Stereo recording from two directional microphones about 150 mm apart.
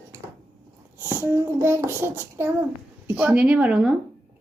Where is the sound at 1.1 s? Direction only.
15° right (ahead or behind).